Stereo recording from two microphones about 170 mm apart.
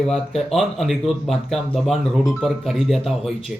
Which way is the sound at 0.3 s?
Centre (ahead or behind).